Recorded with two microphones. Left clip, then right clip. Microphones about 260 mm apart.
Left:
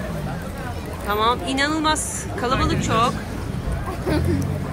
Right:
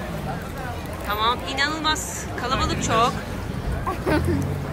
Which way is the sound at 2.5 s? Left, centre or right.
Right.